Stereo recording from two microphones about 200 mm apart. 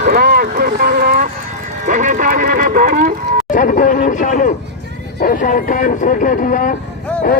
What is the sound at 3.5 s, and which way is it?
Speech, 40° left (ahead or behind).